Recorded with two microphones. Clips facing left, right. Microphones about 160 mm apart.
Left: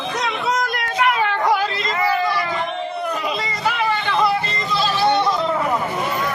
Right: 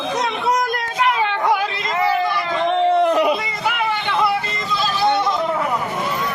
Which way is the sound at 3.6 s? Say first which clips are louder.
Left 2 dB; 10° right (ahead or behind).